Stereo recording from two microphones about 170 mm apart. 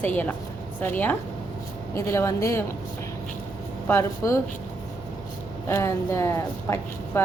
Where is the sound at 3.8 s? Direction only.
15° left (ahead or behind).